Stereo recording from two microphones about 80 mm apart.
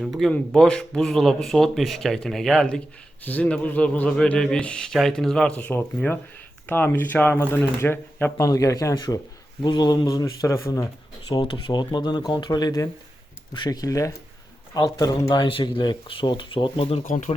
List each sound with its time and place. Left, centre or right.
0.0 s speech: centre
3.2 s speech: centre
8.4 s a man's voice: left
9.0 s speech: left
10.4 s speech: left
11.3 s speech: left
12.3 s a man's voice: left
15.3 s speech: left